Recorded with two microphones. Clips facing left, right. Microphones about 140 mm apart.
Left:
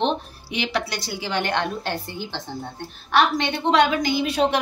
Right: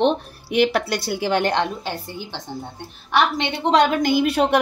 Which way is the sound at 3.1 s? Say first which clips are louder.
Even; 25° right (ahead or behind).